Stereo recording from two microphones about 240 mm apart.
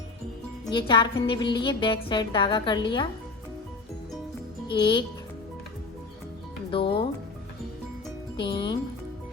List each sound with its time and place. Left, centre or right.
0.6 s speech: centre
4.7 s speech: centre
6.7 s speech: left
8.4 s speech: centre